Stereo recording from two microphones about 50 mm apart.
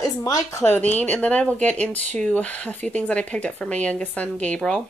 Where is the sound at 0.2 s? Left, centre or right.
Left.